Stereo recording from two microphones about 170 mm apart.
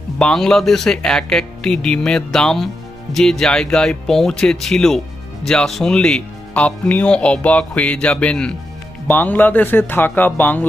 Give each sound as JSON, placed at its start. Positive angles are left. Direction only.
{"t": 0.2, "sound": "speech", "side_deg": 5}